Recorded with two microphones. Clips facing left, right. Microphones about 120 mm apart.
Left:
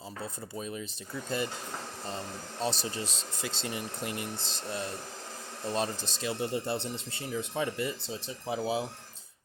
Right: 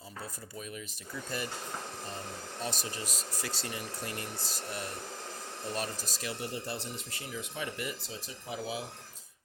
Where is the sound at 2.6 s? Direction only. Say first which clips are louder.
Left 6 dB; 30° left (ahead or behind).